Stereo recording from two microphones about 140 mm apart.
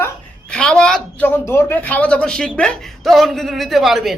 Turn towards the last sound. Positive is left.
turn(degrees=0)  # may be behind; listen again after turning